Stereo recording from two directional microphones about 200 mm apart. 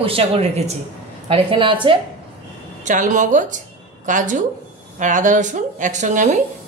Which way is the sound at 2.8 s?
40° right (ahead or behind).